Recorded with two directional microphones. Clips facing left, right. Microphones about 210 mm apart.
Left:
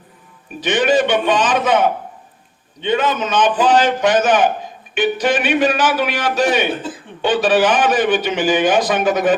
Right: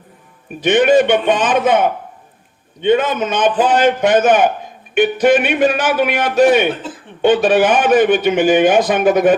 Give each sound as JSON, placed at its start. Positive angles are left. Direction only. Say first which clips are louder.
{"t": 0.6, "sound": "a man's voice", "louder": "right 4 dB", "side_deg": -55}